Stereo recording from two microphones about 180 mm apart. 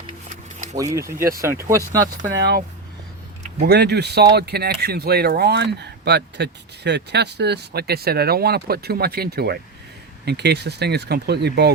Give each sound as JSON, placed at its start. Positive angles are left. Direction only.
{"t": 0.3, "sound": "a sound", "side_deg": -40}
{"t": 0.8, "sound": "speech", "side_deg": -15}
{"t": 3.6, "sound": "speech", "side_deg": -65}